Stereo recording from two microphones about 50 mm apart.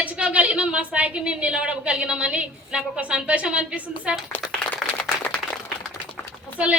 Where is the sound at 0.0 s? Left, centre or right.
Right.